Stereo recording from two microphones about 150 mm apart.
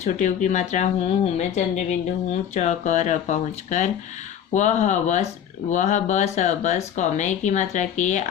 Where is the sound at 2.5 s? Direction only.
55° left (ahead or behind).